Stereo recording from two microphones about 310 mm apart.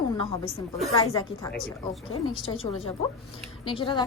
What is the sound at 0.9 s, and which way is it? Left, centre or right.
A woman's voice, centre.